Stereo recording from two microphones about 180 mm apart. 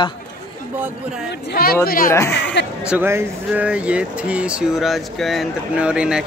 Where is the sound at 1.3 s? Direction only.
60° left (ahead or behind).